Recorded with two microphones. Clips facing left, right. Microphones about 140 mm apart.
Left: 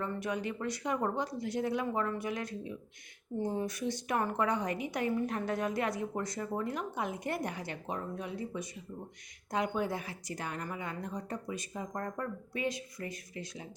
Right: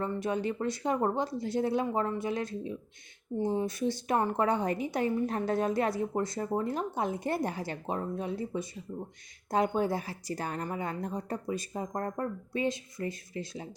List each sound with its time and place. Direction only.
0.1 s a woman's voice: 30° right (ahead or behind)